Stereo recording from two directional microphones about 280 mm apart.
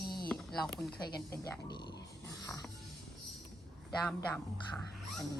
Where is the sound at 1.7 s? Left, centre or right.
Centre.